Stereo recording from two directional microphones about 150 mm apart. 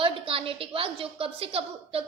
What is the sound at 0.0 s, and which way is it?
A woman's voice, 35° right (ahead or behind).